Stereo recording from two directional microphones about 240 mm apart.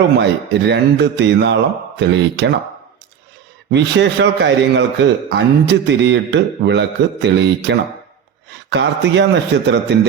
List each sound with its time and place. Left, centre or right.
0.2 s a man's voice: right
3.7 s a man's voice: right